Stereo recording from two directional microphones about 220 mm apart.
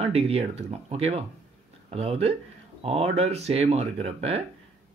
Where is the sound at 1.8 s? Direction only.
30° right (ahead or behind).